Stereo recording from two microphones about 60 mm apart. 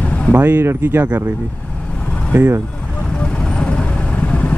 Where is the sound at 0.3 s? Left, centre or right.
Right.